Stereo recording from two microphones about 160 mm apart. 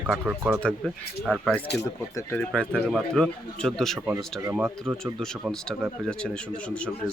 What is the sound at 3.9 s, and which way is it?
Speech, 10° right (ahead or behind).